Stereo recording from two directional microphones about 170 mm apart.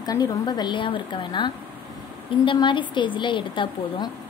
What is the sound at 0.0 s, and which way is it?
A woman's voice, 20° left (ahead or behind).